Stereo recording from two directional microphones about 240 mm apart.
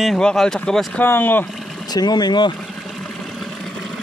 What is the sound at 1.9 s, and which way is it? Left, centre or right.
Speech, centre.